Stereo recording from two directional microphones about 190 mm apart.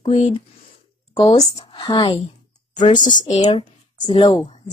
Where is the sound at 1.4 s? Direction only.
30° left (ahead or behind).